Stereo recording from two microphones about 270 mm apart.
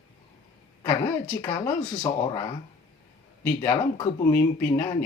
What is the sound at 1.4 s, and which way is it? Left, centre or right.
Speech, centre.